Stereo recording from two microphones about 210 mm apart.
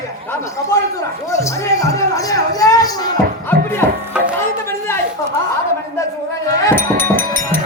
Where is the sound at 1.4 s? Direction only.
15° left (ahead or behind).